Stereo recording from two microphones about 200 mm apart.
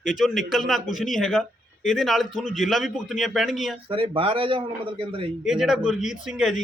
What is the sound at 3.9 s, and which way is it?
Speech, 25° right (ahead or behind).